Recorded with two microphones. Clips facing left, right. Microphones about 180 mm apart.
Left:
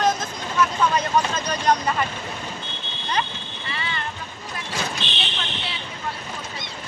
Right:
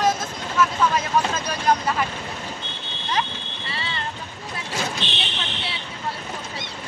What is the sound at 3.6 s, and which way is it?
Vehicle, 30° right (ahead or behind).